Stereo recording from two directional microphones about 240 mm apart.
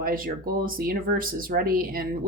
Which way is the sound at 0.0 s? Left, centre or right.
Right.